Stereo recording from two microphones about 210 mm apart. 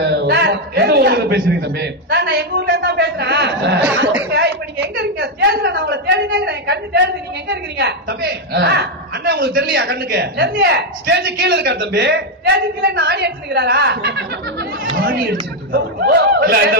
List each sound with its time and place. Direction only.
0.0 s a man's voice: 55° right (ahead or behind)
4.9 s a woman's voice: 55° right (ahead or behind)